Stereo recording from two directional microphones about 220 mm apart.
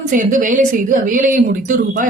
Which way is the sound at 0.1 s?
35° right (ahead or behind).